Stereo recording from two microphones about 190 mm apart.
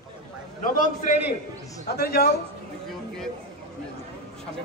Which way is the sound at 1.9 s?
55° left (ahead or behind).